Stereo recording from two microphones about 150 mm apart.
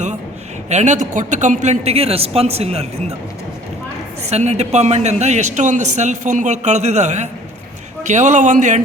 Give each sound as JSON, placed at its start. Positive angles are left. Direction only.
{"t": 0.7, "sound": "a man's voice", "side_deg": -50}
{"t": 4.3, "sound": "a man's voice", "side_deg": -45}